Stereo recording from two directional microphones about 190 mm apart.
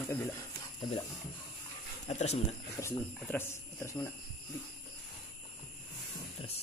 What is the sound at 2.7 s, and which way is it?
Speech, 10° left (ahead or behind).